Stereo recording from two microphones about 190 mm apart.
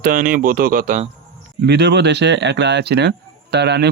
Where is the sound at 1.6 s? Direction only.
60° right (ahead or behind).